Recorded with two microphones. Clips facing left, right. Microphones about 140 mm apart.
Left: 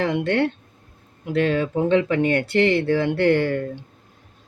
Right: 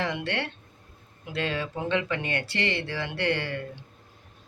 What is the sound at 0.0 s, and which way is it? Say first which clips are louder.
Speech: left 9 dB; 50° left (ahead or behind).